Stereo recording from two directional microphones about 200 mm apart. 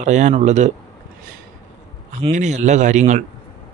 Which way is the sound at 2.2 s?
35° right (ahead or behind).